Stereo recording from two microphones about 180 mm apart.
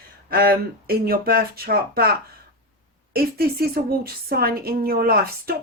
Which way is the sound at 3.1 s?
55° right (ahead or behind).